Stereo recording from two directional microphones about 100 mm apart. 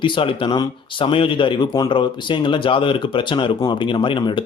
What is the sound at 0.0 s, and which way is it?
Speech, 55° left (ahead or behind).